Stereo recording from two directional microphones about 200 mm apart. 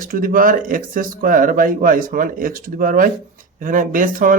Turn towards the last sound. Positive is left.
turn(degrees=-40)  # may be behind; listen again after turning